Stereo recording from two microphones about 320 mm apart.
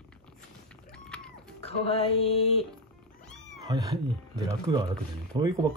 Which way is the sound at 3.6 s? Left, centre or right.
Centre.